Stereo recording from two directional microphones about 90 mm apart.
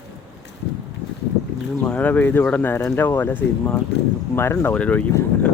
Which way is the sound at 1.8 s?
15° left (ahead or behind).